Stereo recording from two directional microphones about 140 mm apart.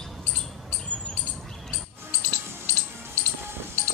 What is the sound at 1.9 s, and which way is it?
Music, 15° right (ahead or behind).